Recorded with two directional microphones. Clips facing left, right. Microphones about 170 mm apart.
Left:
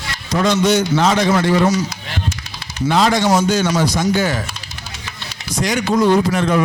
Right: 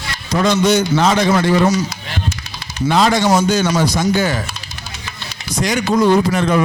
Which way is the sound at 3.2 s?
35° right (ahead or behind).